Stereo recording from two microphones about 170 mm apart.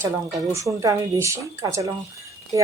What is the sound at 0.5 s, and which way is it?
A woman's voice, 20° right (ahead or behind).